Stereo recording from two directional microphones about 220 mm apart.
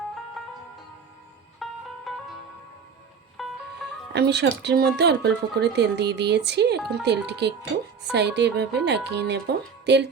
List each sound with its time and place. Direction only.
1.6 s music: centre (ahead or behind)
3.4 s music: centre (ahead or behind)
4.1 s speech: 50° right (ahead or behind)